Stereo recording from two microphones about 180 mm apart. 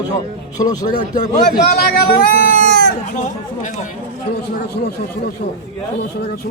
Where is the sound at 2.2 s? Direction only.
50° left (ahead or behind).